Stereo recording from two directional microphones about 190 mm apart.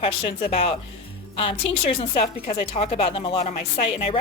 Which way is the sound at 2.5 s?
30° left (ahead or behind).